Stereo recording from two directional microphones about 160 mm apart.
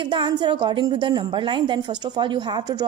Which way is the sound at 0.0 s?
30° right (ahead or behind).